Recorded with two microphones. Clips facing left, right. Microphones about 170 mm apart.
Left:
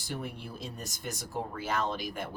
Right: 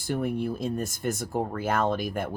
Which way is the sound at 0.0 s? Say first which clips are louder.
Right 11 dB; 55° right (ahead or behind).